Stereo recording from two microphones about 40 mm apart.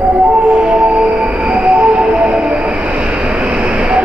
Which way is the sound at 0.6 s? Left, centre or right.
Right.